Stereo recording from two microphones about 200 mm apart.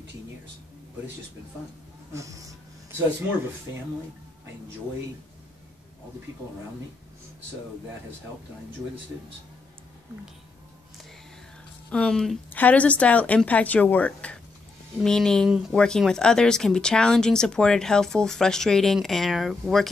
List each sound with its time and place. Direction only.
2.1 s speech: 15° right (ahead or behind)
11.9 s a woman's voice: 5° left (ahead or behind)